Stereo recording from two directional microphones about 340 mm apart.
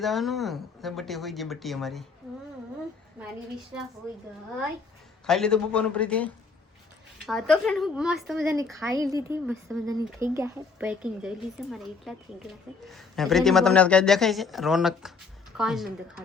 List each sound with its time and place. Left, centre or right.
0.0 s a woman's voice: centre
5.2 s a woman's voice: centre